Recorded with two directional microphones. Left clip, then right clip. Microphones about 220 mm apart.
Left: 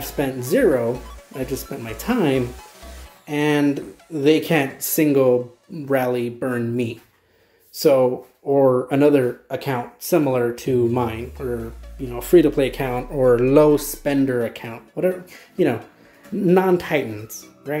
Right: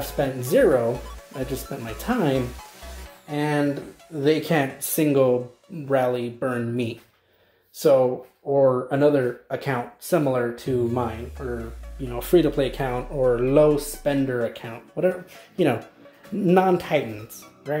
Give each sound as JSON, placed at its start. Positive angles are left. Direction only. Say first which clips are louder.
{"t": 0.2, "sound": "speech", "louder": "left 1 dB", "side_deg": 0}
{"t": 4.3, "sound": "speech", "louder": "left 4 dB", "side_deg": 5}
{"t": 9.5, "sound": "speech", "louder": "left 2 dB", "side_deg": 0}
{"t": 11.5, "sound": "speech", "louder": "left 4 dB", "side_deg": 0}
{"t": 13.2, "sound": "speech", "louder": "left 4 dB", "side_deg": 20}